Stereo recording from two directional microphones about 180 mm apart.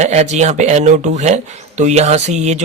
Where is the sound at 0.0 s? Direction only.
40° right (ahead or behind).